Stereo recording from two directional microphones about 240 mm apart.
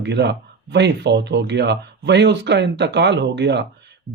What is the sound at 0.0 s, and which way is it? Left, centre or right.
Speech, right.